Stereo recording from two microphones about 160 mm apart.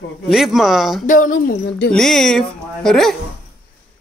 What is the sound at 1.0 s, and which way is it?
Speech, 55° left (ahead or behind).